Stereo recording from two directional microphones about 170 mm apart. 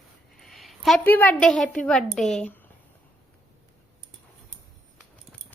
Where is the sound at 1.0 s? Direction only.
10° left (ahead or behind).